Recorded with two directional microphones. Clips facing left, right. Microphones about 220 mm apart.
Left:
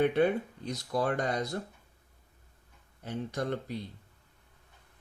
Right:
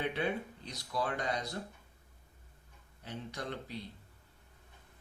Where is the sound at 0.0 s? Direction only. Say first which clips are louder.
Left 9 dB; 50° left (ahead or behind).